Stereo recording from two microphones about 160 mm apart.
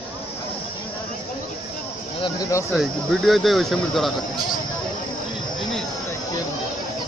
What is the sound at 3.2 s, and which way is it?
Speech, centre (ahead or behind).